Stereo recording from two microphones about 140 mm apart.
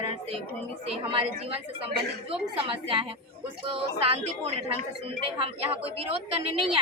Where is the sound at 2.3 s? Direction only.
40° right (ahead or behind).